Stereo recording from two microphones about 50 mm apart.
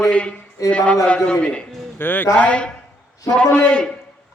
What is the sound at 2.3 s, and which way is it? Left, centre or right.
A man's voice, left.